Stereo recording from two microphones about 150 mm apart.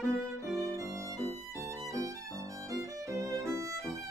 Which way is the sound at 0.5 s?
20° right (ahead or behind).